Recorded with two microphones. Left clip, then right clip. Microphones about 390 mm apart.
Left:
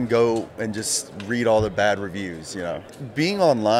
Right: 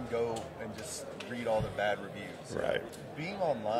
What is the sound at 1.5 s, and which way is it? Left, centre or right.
Speech, left.